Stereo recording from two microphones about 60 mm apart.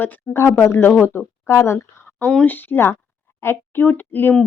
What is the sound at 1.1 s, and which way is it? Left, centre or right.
Speech, left.